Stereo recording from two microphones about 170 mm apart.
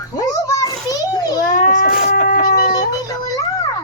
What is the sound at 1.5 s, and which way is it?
Crying, 50° left (ahead or behind).